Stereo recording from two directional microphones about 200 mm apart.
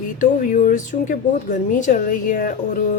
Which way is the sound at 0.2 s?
40° left (ahead or behind).